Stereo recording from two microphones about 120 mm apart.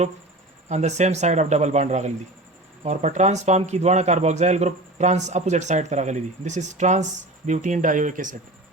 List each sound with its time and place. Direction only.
0.7 s speech: 70° right (ahead or behind); by 8.4 s 90° right